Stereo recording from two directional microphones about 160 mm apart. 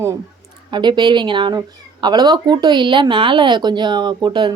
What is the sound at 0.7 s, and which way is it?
A woman's voice, 30° right (ahead or behind).